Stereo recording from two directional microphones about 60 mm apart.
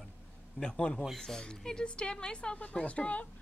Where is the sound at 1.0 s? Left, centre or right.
Centre.